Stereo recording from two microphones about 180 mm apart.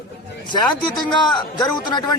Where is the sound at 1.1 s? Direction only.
25° left (ahead or behind).